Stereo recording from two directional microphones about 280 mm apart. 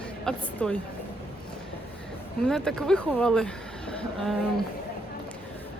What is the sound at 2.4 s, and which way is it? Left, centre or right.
Speech, centre.